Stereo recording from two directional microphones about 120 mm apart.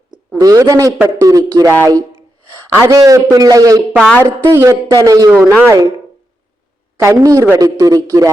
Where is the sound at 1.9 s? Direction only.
30° right (ahead or behind).